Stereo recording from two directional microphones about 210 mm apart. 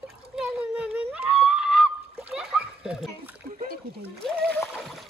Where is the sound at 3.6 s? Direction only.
45° right (ahead or behind).